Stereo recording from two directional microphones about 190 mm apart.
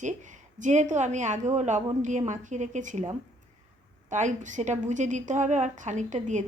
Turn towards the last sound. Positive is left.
turn(degrees=-40)  # may be behind; listen again after turning